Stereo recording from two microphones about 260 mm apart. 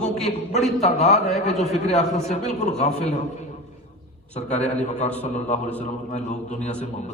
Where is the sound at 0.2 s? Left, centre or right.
Left.